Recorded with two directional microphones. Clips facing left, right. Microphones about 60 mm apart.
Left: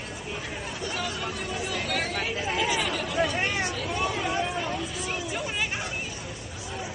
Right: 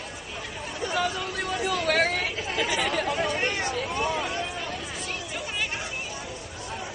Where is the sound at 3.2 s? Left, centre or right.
Centre.